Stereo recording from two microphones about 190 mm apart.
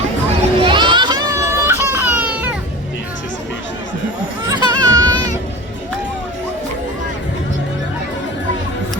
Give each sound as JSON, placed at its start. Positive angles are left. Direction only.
{"t": 0.6, "sound": "children playing", "side_deg": -25}
{"t": 4.5, "sound": "music", "side_deg": -20}